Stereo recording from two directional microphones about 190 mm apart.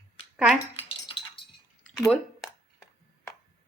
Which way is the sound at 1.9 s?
Centre (ahead or behind).